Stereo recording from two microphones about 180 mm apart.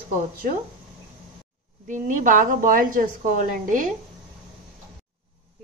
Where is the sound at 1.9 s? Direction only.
45° right (ahead or behind).